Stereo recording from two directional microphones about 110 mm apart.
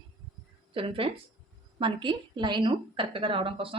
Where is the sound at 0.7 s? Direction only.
55° right (ahead or behind).